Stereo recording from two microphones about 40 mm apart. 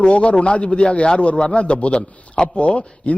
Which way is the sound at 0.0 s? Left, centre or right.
Left.